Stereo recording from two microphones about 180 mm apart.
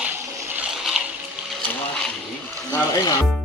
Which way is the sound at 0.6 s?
Centre (ahead or behind).